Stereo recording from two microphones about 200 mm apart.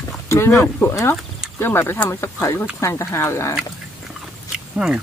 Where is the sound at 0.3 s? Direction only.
15° left (ahead or behind).